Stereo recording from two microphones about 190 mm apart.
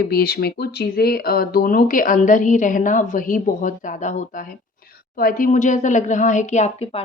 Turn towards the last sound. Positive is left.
turn(degrees=35)  # may be behind; listen again after turning